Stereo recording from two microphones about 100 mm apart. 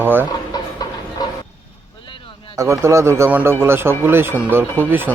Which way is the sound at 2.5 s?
30° right (ahead or behind).